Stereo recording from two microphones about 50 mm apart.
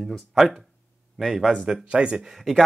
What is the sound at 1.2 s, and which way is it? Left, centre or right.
Speech, centre.